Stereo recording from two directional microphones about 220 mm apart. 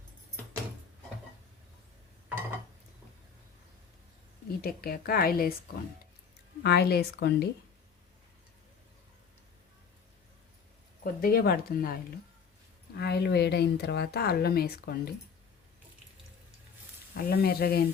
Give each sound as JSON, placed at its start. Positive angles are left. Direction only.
{"t": 4.6, "sound": "speech", "side_deg": 45}
{"t": 11.0, "sound": "speech", "side_deg": 45}
{"t": 13.0, "sound": "speech", "side_deg": 45}
{"t": 17.2, "sound": "speech", "side_deg": 45}